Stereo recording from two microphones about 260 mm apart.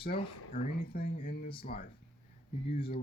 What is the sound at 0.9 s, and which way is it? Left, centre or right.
Speech, left.